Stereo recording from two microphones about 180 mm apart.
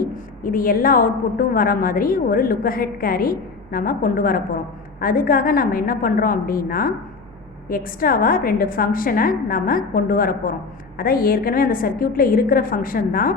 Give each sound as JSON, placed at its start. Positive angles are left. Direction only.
{"t": 0.0, "sound": "a woman's voice", "side_deg": 50}